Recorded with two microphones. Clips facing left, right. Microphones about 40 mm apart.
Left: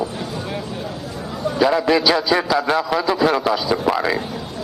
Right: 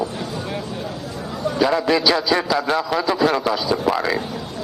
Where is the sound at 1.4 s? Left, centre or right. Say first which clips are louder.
Left 2 dB; centre.